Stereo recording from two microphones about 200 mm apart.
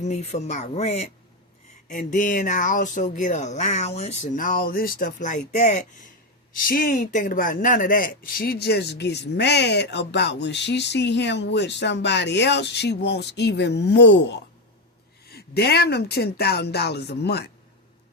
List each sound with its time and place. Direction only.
0.0 s speech: 35° left (ahead or behind); by 17.5 s 55° left (ahead or behind)